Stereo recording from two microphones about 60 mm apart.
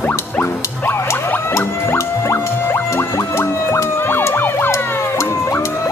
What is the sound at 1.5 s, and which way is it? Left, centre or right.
Music, left.